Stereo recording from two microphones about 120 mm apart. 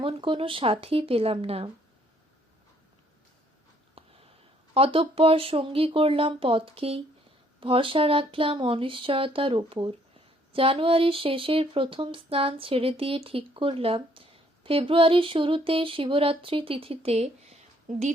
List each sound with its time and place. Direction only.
0.0 s speech: 45° right (ahead or behind)
4.0 s a sound: 55° right (ahead or behind)
4.7 s speech: 50° right (ahead or behind); by 18.1 s 70° right (ahead or behind)